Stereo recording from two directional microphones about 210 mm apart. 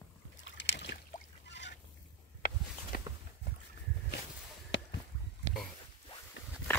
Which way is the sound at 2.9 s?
45° left (ahead or behind).